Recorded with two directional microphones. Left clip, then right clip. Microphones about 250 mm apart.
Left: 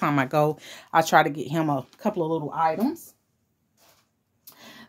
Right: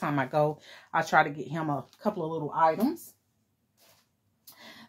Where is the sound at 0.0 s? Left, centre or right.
Left.